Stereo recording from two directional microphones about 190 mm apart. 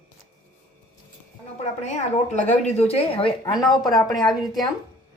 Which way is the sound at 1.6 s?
35° left (ahead or behind).